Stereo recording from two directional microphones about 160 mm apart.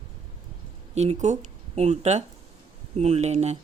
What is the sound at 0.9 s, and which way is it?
Speech, 45° right (ahead or behind).